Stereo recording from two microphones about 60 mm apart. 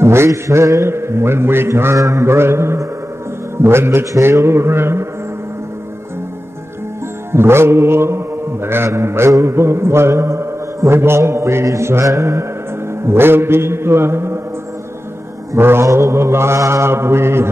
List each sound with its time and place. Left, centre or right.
0.0 s a sound: right
0.3 s mantra: right
2.0 s mantra: right
2.2 s mantra: right
3.6 s a man's voice: right
4.2 s mantra: right
7.3 s mantra: right
12.1 s music: right
15.5 s mantra: right